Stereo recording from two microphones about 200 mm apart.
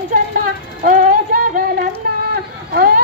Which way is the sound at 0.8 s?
40° right (ahead or behind).